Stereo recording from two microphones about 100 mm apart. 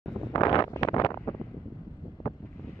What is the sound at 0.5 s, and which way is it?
Wind noise, 45° left (ahead or behind).